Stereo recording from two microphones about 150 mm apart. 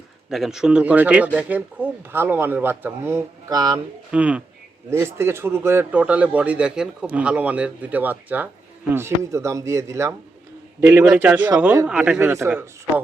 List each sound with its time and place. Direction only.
0.3 s a man's voice: centre (ahead or behind); by 3.8 s 25° right (ahead or behind)
4.1 s a man's voice: 10° right (ahead or behind)